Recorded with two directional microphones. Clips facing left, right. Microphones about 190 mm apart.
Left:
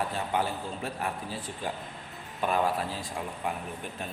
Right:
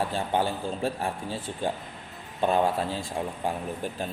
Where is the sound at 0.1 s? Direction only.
30° right (ahead or behind).